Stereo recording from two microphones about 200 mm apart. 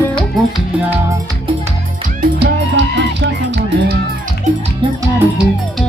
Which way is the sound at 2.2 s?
55° right (ahead or behind).